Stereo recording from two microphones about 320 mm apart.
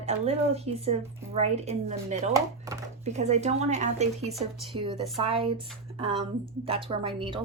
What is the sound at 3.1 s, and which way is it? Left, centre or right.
Speech, right.